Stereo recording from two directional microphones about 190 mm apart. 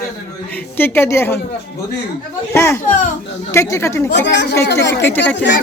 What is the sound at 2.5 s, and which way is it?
A woman's voice, 15° left (ahead or behind).